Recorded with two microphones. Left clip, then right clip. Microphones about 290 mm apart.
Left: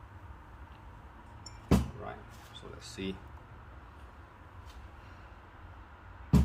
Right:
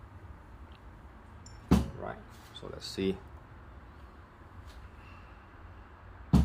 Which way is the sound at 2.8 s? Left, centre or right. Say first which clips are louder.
Right 8 dB; right.